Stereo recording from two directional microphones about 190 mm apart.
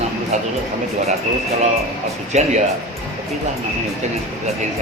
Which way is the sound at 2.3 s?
35° right (ahead or behind).